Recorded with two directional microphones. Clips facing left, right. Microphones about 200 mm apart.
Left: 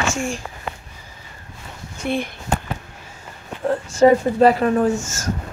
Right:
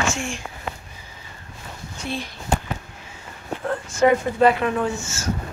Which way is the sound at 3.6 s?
30° left (ahead or behind).